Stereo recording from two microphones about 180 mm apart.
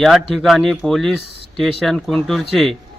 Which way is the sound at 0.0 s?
Centre (ahead or behind).